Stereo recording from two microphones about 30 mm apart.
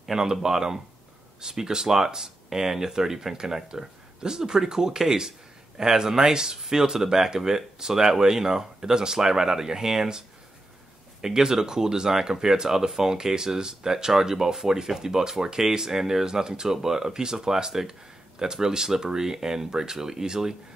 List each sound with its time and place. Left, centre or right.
0.0 s speech: centre
11.1 s speech: centre
15.9 s speech: centre
16.3 s speech: right
16.6 s speech: centre